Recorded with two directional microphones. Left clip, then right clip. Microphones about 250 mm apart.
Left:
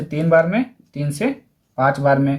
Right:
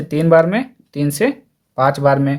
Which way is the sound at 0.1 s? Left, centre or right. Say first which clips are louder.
Right 3 dB; right.